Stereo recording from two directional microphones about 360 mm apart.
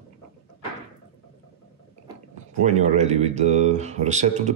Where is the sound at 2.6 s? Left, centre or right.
Centre.